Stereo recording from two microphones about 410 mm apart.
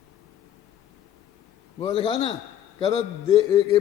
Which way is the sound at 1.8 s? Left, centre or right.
Centre.